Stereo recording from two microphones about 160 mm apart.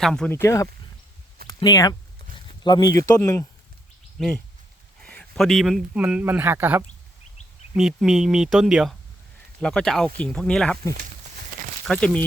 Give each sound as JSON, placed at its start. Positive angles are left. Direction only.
{"t": 0.0, "sound": "speech", "side_deg": 5}
{"t": 0.3, "sound": "speech", "side_deg": 20}
{"t": 4.2, "sound": "speech", "side_deg": 5}
{"t": 7.7, "sound": "speech", "side_deg": -5}
{"t": 11.9, "sound": "speech", "side_deg": 5}